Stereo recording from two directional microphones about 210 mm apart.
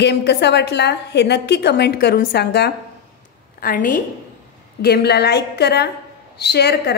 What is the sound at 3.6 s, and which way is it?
Speech, 40° left (ahead or behind).